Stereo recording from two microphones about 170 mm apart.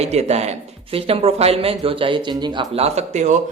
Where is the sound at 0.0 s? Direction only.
40° right (ahead or behind).